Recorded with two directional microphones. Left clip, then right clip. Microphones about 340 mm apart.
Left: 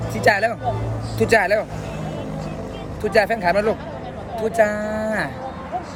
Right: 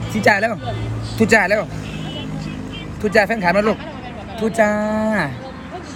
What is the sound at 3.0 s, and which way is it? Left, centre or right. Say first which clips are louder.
Speech: right 2 dB; centre.